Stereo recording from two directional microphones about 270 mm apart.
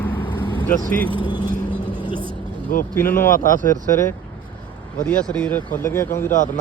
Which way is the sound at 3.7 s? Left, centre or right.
Centre.